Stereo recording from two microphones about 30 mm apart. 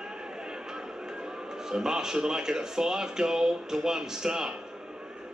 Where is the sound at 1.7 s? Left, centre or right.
Centre.